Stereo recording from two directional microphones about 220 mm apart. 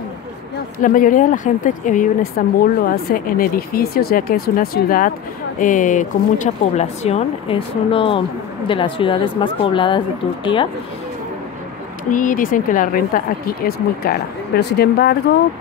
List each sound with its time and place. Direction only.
0.8 s a woman's voice: 35° left (ahead or behind)
12.1 s a woman's voice: 35° left (ahead or behind)